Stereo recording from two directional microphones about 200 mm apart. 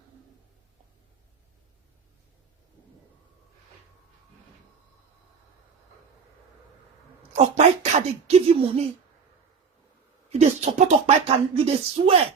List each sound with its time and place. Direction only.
7.3 s speech: 30° right (ahead or behind)
10.2 s speech: 35° right (ahead or behind)